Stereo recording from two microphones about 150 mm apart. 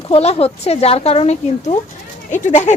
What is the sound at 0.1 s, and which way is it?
Speech, 45° left (ahead or behind).